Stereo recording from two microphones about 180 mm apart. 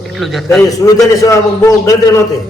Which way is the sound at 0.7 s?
20° left (ahead or behind).